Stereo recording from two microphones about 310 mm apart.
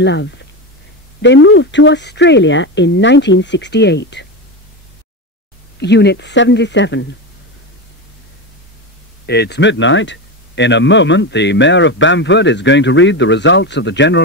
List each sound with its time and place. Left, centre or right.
0.0 s speech: left
5.8 s speech: left
9.2 s speech: left